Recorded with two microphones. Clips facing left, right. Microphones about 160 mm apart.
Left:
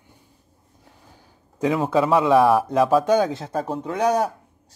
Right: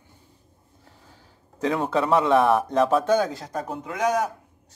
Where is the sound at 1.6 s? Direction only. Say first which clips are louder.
Left 3 dB; 5° left (ahead or behind).